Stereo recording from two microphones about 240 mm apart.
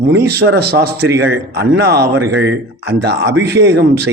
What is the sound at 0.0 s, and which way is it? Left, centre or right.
A man's voice, right.